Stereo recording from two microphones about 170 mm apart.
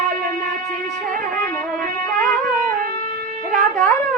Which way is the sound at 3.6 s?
5° left (ahead or behind).